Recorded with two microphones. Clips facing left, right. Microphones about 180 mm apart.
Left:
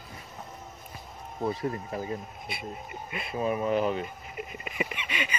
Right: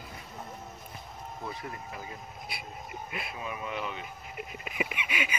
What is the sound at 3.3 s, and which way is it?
Speech, 40° left (ahead or behind).